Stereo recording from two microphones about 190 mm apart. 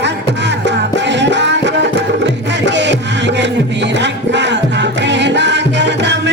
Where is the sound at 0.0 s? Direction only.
65° right (ahead or behind).